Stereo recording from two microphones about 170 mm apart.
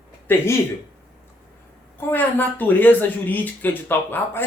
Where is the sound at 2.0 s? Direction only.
10° left (ahead or behind).